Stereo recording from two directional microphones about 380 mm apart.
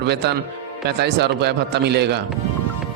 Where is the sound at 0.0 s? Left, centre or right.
Right.